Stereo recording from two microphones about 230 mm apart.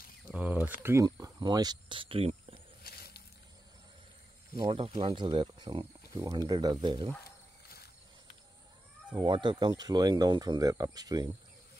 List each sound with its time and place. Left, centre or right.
0.3 s speech: centre; by 2.6 s right
2.8 s squish: left
4.6 s speech: right
7.2 s wild animals: left
9.1 s speech: centre